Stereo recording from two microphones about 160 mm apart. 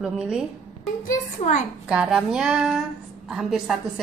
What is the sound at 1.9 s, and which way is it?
A woman's voice, 5° right (ahead or behind).